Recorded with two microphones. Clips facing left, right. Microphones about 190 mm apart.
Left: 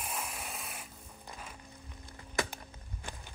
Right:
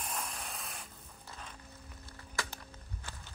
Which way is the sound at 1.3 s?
10° left (ahead or behind).